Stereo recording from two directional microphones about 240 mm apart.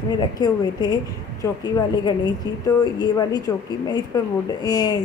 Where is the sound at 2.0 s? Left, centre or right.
Centre.